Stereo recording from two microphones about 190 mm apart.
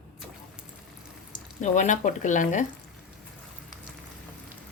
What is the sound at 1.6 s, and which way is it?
Speech, 40° left (ahead or behind).